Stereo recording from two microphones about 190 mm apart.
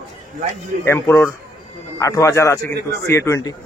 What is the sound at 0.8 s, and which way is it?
A man's voice, 15° left (ahead or behind).